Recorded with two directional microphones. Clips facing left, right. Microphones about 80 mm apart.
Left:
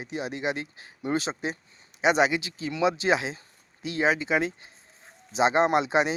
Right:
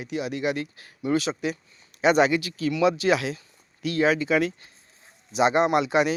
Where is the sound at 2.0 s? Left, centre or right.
Centre.